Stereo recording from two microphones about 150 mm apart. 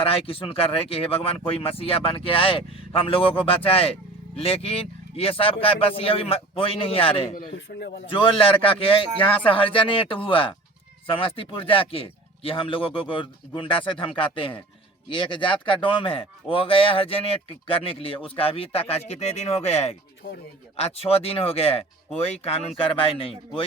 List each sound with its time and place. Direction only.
0.0 s a man's voice: 40° left (ahead or behind)
7.7 s a man's voice: 90° left
8.0 s a man's voice: 35° left (ahead or behind)